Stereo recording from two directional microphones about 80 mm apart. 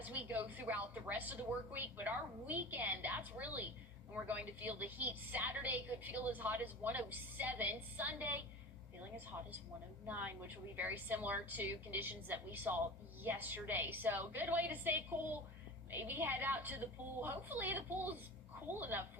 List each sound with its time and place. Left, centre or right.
0.0 s a woman's voice: right
10.1 s a woman's voice: right